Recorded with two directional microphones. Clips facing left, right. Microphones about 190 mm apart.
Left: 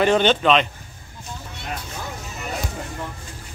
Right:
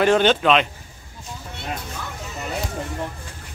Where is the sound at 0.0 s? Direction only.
5° right (ahead or behind).